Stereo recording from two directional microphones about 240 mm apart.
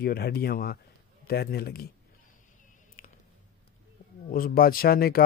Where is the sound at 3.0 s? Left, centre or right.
Left.